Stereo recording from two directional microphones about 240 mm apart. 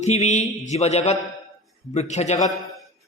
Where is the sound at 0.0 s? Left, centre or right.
Left.